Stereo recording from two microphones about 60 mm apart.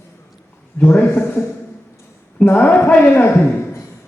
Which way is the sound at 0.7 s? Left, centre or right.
Left.